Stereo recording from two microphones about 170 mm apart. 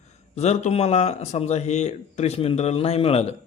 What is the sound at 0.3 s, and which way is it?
A man's voice, 40° left (ahead or behind).